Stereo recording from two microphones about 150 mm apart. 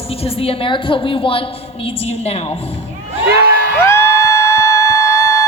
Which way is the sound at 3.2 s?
85° right.